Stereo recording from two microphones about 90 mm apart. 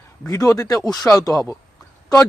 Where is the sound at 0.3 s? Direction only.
35° left (ahead or behind).